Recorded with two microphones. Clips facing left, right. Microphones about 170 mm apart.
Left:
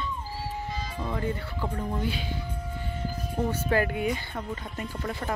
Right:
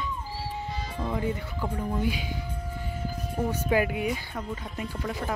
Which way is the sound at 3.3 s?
10° right (ahead or behind).